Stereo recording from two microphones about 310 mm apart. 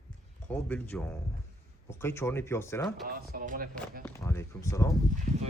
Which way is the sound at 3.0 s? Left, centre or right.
Right.